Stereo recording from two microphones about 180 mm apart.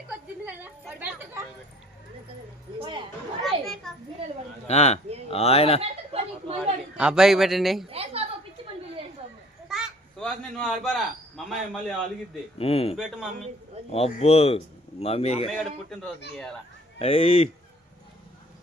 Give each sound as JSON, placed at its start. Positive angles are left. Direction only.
{"t": 0.1, "sound": "a sound", "side_deg": -10}
{"t": 2.7, "sound": "chatter", "side_deg": -25}
{"t": 3.4, "sound": "children playing", "side_deg": 0}
{"t": 4.7, "sound": "a man's voice", "side_deg": 35}
{"t": 5.8, "sound": "a sound", "side_deg": -35}
{"t": 6.9, "sound": "a man's voice", "side_deg": -5}
{"t": 7.9, "sound": "a woman's voice", "side_deg": -35}
{"t": 9.6, "sound": "a sound", "side_deg": 0}
{"t": 10.8, "sound": "a man's voice", "side_deg": 0}
{"t": 12.5, "sound": "a man's voice", "side_deg": 35}
{"t": 13.0, "sound": "a man's voice", "side_deg": 0}
{"t": 13.9, "sound": "a man's voice", "side_deg": 35}
{"t": 15.4, "sound": "a man's voice", "side_deg": 0}
{"t": 17.0, "sound": "a man's voice", "side_deg": 35}